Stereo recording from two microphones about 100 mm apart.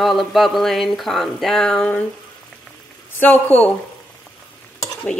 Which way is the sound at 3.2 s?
15° left (ahead or behind).